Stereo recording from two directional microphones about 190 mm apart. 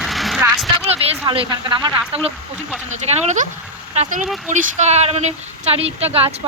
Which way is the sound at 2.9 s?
40° right (ahead or behind).